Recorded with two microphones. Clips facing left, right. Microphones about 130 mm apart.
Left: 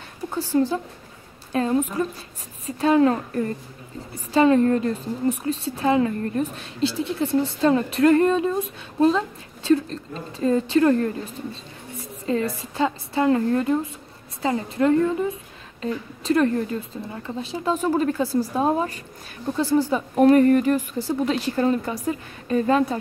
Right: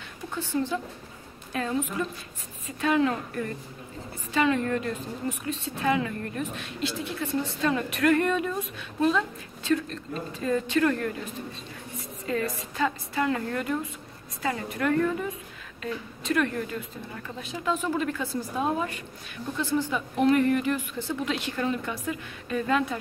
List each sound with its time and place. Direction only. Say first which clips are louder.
0.3 s a woman's voice: left 7 dB; 35° left (ahead or behind)
12.3 s a woman's voice: left 5 dB; 30° left (ahead or behind)